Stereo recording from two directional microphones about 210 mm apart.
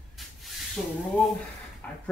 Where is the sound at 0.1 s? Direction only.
Centre (ahead or behind).